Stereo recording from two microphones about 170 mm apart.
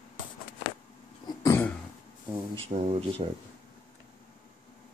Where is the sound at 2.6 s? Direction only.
40° right (ahead or behind).